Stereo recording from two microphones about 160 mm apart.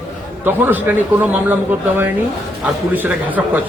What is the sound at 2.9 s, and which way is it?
Speech, 10° right (ahead or behind).